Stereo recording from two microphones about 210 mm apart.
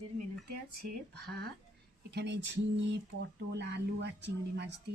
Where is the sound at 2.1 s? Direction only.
55° right (ahead or behind).